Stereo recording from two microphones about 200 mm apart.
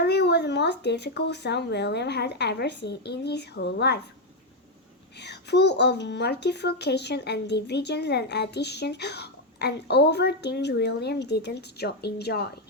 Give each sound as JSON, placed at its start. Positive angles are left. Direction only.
{"t": 0.0, "sound": "a child's voice", "side_deg": 55}
{"t": 5.1, "sound": "a child's voice", "side_deg": 60}